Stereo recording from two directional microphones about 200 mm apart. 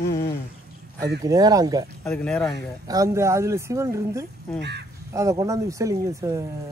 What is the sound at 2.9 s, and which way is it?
Speech, 15° right (ahead or behind).